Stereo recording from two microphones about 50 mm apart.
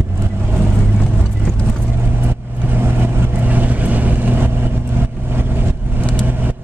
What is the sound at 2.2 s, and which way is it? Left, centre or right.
Vehicle, right.